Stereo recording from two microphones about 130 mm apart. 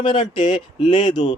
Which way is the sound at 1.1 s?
60° left (ahead or behind).